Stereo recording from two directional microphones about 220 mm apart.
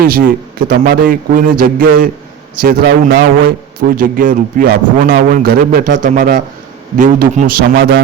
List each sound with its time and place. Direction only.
0.0 s a man's voice: 40° right (ahead or behind)